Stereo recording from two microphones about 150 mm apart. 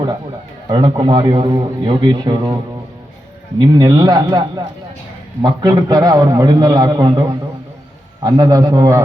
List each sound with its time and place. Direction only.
0.7 s a man's voice: 30° right (ahead or behind)
3.6 s a man's voice: 25° right (ahead or behind)